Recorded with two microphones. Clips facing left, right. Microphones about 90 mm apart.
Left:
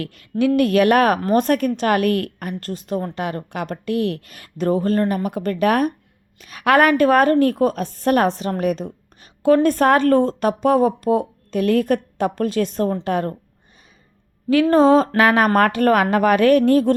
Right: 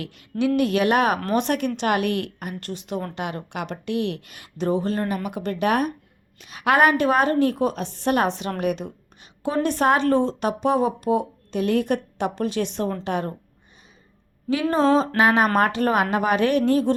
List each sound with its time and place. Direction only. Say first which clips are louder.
0.0 s speech: left 4 dB; 50° left (ahead or behind)
14.5 s a sound: left 6 dB; 60° left (ahead or behind)
15.5 s speech: left 4 dB; 55° left (ahead or behind)